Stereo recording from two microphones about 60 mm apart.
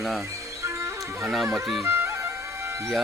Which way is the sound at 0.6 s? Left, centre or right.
Right.